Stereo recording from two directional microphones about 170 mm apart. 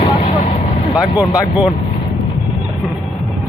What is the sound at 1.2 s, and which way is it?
Speech, 5° right (ahead or behind).